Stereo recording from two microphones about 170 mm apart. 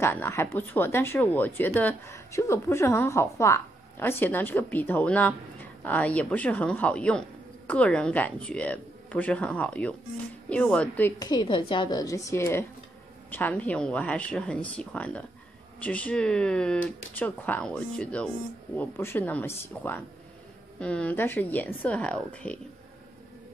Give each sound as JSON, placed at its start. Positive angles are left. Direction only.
{"t": 0.0, "sound": "a woman's voice", "side_deg": 15}
{"t": 11.1, "sound": "a woman's voice", "side_deg": 25}